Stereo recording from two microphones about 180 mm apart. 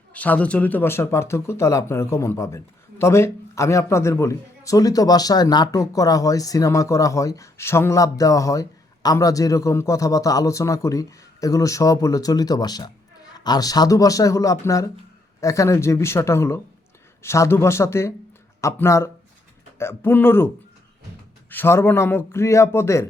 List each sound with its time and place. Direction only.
0.1 s a man's voice: 10° left (ahead or behind)
21.5 s a man's voice: 10° left (ahead or behind)